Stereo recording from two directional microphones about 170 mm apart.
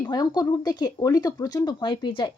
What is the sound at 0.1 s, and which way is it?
Speech, 25° left (ahead or behind).